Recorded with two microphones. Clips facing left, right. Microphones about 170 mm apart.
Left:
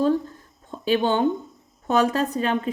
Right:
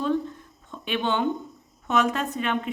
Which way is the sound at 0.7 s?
35° left (ahead or behind).